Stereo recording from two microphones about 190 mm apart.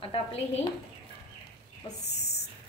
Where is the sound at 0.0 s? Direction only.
30° left (ahead or behind).